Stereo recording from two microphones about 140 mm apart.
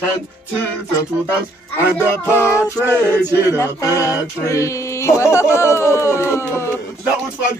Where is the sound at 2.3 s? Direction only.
20° left (ahead or behind).